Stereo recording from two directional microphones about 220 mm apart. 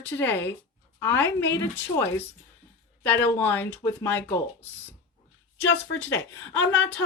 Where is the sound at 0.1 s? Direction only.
10° left (ahead or behind).